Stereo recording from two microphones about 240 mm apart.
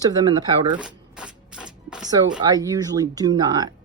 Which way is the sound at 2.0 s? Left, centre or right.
Centre.